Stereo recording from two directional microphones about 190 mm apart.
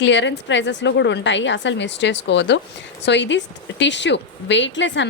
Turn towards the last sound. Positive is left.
turn(degrees=70)  # may be behind; listen again after turning